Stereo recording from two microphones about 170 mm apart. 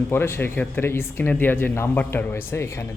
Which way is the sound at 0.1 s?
15° left (ahead or behind).